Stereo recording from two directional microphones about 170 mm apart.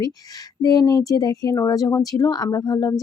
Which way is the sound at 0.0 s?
20° left (ahead or behind).